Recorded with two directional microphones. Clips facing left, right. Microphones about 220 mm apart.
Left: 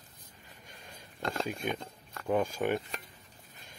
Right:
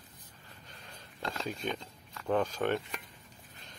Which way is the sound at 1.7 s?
55° left (ahead or behind).